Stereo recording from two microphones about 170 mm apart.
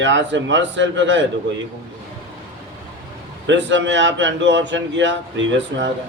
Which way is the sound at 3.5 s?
90° right.